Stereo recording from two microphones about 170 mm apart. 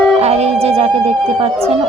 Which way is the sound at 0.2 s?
40° right (ahead or behind).